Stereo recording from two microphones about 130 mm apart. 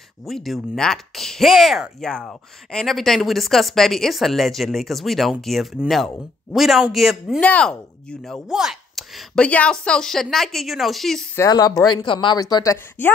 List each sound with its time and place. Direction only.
0.2 s speech: centre (ahead or behind)
11.3 s speech: 30° left (ahead or behind)
13.0 s speech: 15° left (ahead or behind)